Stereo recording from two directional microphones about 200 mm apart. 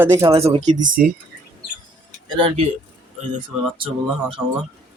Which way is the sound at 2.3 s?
25° right (ahead or behind).